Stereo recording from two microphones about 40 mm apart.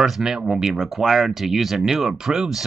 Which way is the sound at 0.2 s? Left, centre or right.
Centre.